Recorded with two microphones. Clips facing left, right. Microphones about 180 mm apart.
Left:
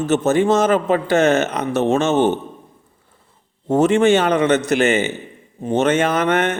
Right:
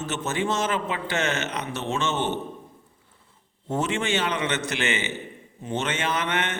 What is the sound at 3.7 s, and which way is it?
A man's voice, 45° left (ahead or behind).